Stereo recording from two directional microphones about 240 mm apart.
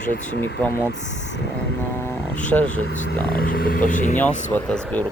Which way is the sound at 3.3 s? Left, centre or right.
Left.